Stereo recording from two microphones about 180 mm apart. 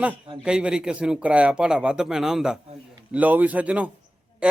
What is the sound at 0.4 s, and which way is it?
A man's voice, 5° right (ahead or behind).